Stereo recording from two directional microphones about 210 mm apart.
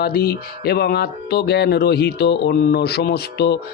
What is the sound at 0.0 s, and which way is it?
Speech, 45° left (ahead or behind).